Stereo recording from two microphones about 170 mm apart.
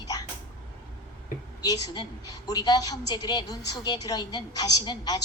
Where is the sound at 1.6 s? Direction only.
20° left (ahead or behind).